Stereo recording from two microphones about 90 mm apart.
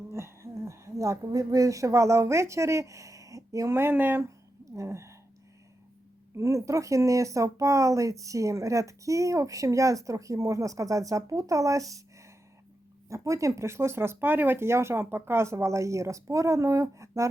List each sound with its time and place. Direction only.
0.1 s a woman's voice: 30° right (ahead or behind)
4.6 s speech: 35° right (ahead or behind)
6.3 s speech: 35° right (ahead or behind)